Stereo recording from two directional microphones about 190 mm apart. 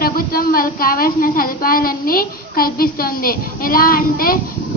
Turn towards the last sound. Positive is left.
turn(degrees=50)  # may be behind; listen again after turning